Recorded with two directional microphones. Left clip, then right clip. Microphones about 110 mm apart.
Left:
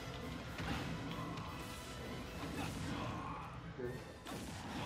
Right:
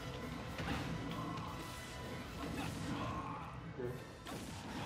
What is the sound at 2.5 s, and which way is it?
Mechanisms, centre (ahead or behind).